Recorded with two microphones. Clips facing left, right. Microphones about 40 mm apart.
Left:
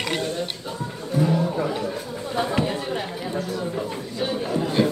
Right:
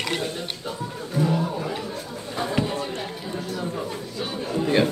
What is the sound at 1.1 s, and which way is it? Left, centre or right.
Music, centre.